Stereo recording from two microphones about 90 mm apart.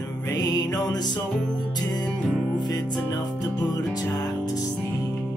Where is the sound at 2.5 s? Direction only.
45° left (ahead or behind).